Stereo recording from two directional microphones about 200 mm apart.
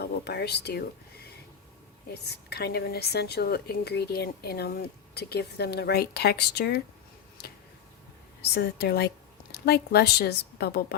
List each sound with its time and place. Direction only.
0.0 s a woman's voice: 55° left (ahead or behind)
2.2 s a woman's voice: 55° left (ahead or behind)
8.5 s a woman's voice: 55° left (ahead or behind)